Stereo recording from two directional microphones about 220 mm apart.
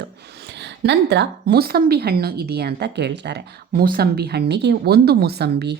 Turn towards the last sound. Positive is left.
turn(degrees=-50)  # may be behind; listen again after turning